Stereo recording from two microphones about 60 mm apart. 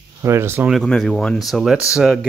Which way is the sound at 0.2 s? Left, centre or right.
Right.